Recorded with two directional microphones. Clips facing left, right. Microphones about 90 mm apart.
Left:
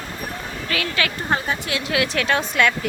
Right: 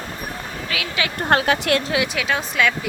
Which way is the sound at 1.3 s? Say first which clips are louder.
Right 9 dB; 70° right (ahead or behind).